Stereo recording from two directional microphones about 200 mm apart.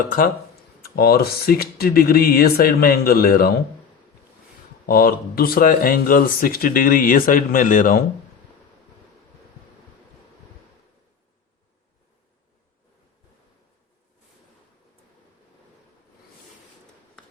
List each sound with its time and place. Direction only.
0.8 s speech: 50° left (ahead or behind)
4.9 s speech: 45° left (ahead or behind)